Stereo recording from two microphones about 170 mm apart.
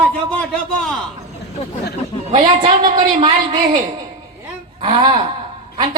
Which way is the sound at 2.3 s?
30° right (ahead or behind).